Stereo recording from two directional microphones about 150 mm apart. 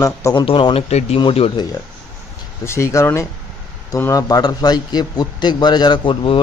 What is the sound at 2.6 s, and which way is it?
A man's voice, 20° left (ahead or behind).